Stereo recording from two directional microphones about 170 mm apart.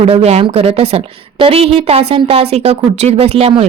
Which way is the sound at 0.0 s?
35° right (ahead or behind).